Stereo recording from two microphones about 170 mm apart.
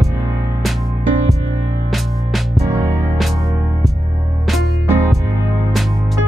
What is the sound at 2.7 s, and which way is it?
Music, 20° right (ahead or behind).